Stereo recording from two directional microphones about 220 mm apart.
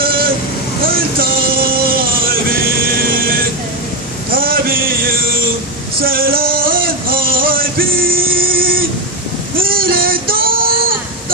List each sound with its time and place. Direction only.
0.0 s vehicle: 40° right (ahead or behind)
1.7 s music: 40° right (ahead or behind)
4.3 s male singing: 40° right (ahead or behind)